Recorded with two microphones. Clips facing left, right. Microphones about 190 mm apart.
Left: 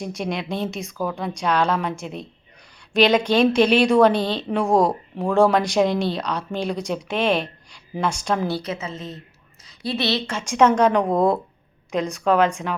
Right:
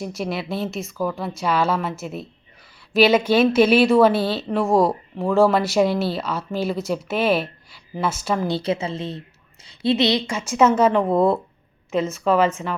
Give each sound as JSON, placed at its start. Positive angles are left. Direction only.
{"t": 0.0, "sound": "a woman's voice", "side_deg": 0}
{"t": 8.4, "sound": "a woman's voice", "side_deg": -25}